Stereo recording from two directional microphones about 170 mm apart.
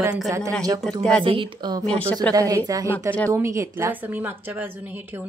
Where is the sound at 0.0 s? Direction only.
5° right (ahead or behind).